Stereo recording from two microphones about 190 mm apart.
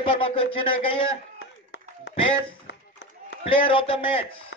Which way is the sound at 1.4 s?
90° left.